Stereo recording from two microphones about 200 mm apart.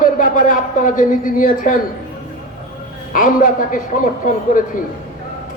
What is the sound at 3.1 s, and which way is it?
Speech, 40° left (ahead or behind).